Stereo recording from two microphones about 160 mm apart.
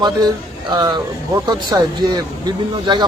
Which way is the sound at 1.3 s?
25° right (ahead or behind).